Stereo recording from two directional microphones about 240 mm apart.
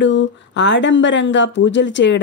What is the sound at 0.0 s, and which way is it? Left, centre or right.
Speech, left.